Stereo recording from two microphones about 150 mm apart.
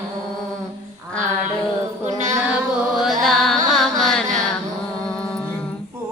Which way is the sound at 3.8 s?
Centre (ahead or behind).